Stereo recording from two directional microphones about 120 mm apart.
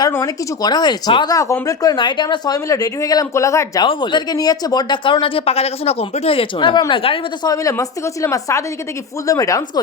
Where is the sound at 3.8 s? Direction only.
40° left (ahead or behind).